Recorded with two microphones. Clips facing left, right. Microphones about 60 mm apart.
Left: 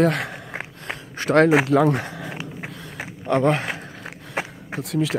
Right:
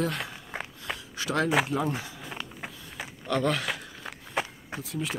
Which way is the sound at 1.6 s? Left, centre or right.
Left.